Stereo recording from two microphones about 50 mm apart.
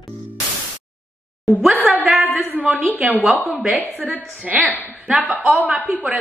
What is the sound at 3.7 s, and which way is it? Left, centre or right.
Speech, right.